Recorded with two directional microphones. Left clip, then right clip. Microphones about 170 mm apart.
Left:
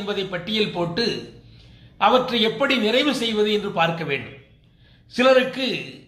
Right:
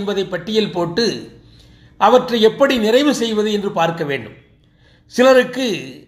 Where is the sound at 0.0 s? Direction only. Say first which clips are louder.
Right 5 dB; 45° right (ahead or behind).